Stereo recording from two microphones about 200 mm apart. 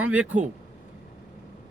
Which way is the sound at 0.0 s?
5° right (ahead or behind).